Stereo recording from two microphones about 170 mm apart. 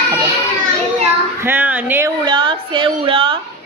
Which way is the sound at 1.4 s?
10° right (ahead or behind).